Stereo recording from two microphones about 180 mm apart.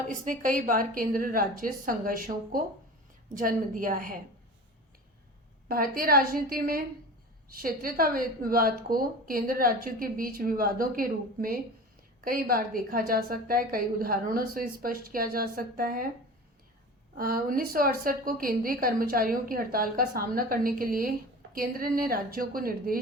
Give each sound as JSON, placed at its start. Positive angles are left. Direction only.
{"t": 0.1, "sound": "a woman's voice", "side_deg": -45}
{"t": 5.6, "sound": "a woman's voice", "side_deg": -55}
{"t": 17.2, "sound": "a woman's voice", "side_deg": -55}